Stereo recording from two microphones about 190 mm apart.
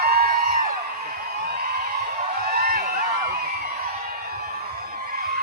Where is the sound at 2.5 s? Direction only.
50° right (ahead or behind).